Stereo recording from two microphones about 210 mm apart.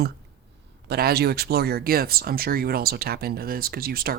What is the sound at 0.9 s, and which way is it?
Speech, 45° right (ahead or behind).